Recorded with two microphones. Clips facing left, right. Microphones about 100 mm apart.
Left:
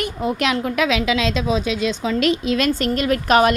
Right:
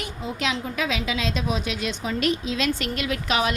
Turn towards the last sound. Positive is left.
turn(degrees=50)  # may be behind; listen again after turning